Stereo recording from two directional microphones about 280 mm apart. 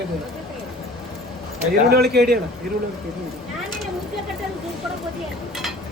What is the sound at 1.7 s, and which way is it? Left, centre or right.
Speech, right.